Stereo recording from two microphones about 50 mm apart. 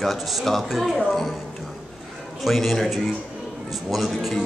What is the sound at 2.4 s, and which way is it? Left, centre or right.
Speech, centre.